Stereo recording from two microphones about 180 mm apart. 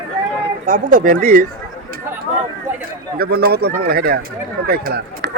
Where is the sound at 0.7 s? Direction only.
50° right (ahead or behind).